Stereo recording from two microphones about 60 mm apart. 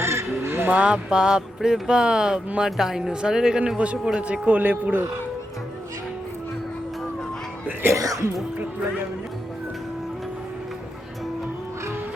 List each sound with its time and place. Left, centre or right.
0.0 s crow: right
0.7 s a man's voice: centre
7.9 s speech: right